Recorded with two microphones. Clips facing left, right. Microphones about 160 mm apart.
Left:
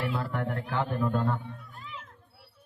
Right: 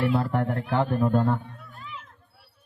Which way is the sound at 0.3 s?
45° right (ahead or behind).